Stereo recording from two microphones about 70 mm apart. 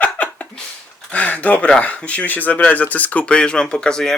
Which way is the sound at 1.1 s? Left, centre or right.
Left.